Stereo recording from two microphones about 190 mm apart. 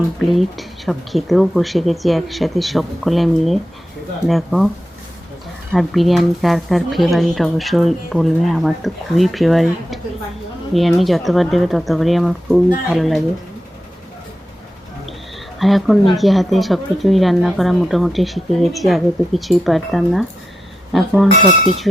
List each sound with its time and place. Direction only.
0.2 s speech: centre (ahead or behind)
5.7 s speech: centre (ahead or behind)
15.5 s speech: centre (ahead or behind)